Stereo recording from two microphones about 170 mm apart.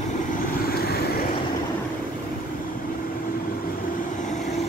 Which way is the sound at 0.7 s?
65° left (ahead or behind).